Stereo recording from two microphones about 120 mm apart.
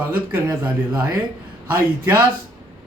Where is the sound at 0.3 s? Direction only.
20° right (ahead or behind).